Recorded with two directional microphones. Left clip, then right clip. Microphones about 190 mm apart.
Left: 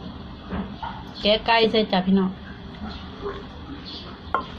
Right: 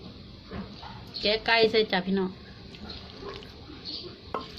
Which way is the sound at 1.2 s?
40° right (ahead or behind).